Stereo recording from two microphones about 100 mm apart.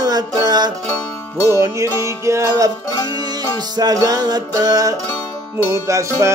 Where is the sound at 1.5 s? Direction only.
30° right (ahead or behind).